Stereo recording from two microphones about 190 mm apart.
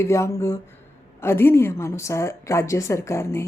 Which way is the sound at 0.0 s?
15° left (ahead or behind).